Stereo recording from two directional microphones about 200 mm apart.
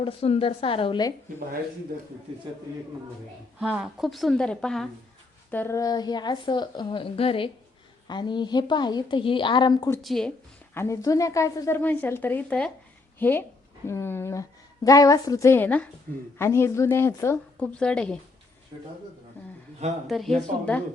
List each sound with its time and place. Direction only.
0.0 s a woman's voice: 30° left (ahead or behind)
3.6 s a woman's voice: 5° right (ahead or behind); by 9.9 s 20° left (ahead or behind)
10.0 s speech: centre (ahead or behind)
10.8 s a woman's voice: 15° left (ahead or behind)
20.1 s speech: centre (ahead or behind)